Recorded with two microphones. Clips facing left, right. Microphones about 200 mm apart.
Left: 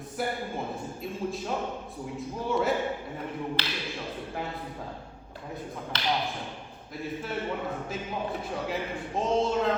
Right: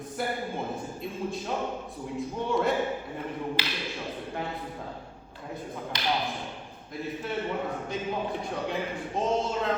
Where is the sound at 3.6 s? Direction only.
10° right (ahead or behind).